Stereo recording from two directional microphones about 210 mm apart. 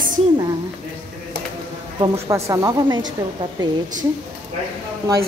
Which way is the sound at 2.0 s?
15° right (ahead or behind).